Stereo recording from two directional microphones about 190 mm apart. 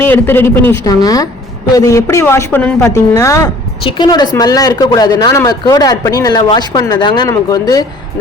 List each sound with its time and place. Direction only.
0.0 s a woman's voice: 10° left (ahead or behind)